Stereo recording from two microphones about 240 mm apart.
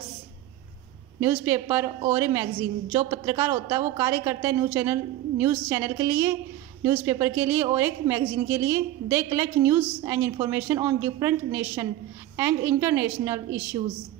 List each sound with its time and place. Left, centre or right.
1.2 s a woman's voice: centre